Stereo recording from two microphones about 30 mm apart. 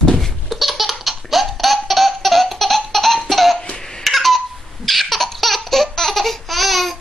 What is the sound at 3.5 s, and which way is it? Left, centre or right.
Laughter, left.